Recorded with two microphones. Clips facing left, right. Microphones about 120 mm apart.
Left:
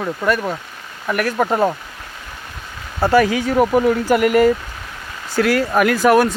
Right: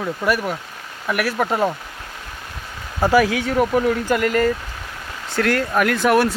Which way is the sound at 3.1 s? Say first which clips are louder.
Left 3 dB; centre (ahead or behind).